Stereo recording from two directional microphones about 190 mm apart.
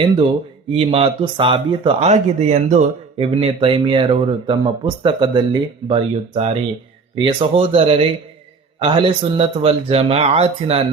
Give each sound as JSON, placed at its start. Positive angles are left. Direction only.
{"t": 0.7, "sound": "speech", "side_deg": -30}